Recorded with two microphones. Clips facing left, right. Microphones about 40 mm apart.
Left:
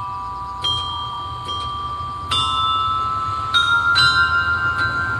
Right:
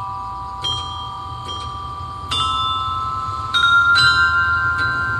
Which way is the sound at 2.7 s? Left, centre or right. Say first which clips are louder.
Left 2 dB; left.